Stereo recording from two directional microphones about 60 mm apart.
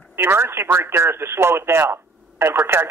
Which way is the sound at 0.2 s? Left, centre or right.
Right.